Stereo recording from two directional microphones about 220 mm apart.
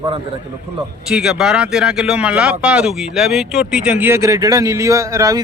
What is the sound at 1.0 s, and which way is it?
Speech, centre (ahead or behind).